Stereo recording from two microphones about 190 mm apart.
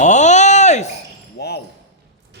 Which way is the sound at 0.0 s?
40° left (ahead or behind).